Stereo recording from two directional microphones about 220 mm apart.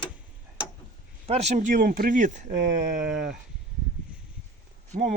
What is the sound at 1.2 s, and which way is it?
Speech, 30° right (ahead or behind).